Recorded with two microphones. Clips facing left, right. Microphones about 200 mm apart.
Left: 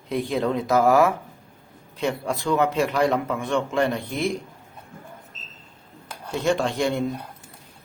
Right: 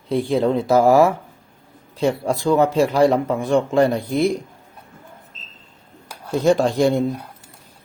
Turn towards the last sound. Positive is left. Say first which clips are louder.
# right 6 dB
turn(degrees=-35)  # may be behind; listen again after turning